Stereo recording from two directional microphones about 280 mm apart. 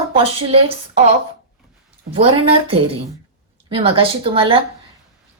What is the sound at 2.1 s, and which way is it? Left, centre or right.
A woman's voice, centre.